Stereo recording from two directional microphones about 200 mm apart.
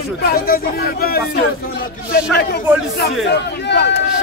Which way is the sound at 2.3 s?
55° left (ahead or behind).